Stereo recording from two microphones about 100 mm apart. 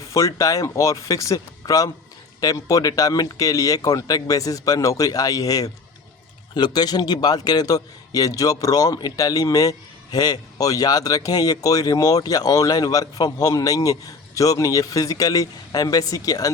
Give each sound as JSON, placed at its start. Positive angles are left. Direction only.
{"t": 0.1, "sound": "a man's voice", "side_deg": 35}